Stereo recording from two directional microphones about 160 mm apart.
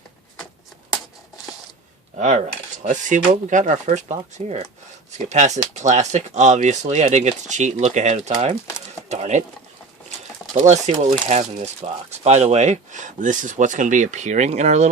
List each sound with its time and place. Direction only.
2.1 s cutlery: 50° right (ahead or behind)
2.8 s speech: 50° right (ahead or behind)
10.5 s speech: 45° right (ahead or behind)